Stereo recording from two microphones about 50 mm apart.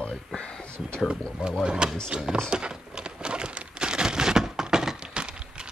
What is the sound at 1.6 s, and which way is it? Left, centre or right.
Speech, centre.